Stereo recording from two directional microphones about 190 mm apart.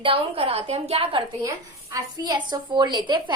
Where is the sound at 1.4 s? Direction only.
20° right (ahead or behind).